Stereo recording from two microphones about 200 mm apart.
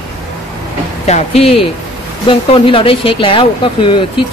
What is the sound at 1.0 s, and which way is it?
Speech, 30° left (ahead or behind).